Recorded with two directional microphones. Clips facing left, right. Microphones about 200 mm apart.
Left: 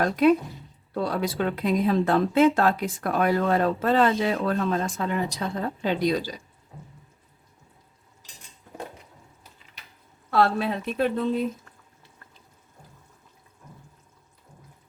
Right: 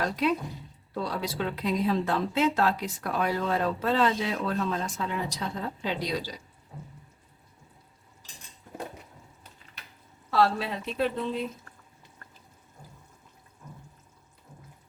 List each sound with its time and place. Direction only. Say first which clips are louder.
0.0 s speech: left 7 dB; 50° left (ahead or behind)
10.3 s speech: left 3 dB; 55° left (ahead or behind)